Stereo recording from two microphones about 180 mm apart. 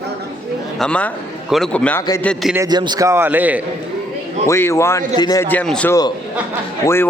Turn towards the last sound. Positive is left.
turn(degrees=15)  # may be behind; listen again after turning